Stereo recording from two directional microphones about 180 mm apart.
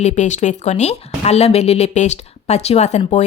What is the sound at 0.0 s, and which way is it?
Speech, 40° left (ahead or behind).